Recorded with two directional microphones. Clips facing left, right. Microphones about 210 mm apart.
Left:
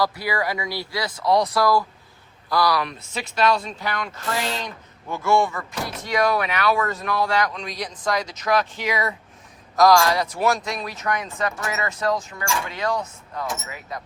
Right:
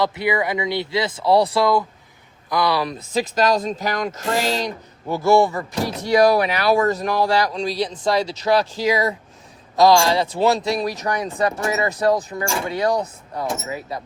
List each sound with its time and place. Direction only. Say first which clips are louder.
0.0 s speech: right 3 dB; 20° right (ahead or behind)
3.2 s speech: right 3 dB; 40° right (ahead or behind)